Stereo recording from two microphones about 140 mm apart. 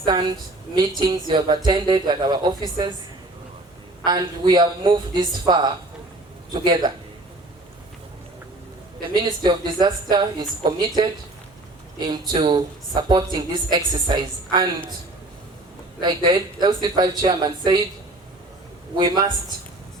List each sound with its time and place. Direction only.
0.0 s speech: 30° right (ahead or behind)
4.0 s speech: 30° right (ahead or behind)
9.0 s speech: 30° right (ahead or behind)
16.0 s speech: 30° right (ahead or behind)
18.9 s a man's voice: 30° right (ahead or behind)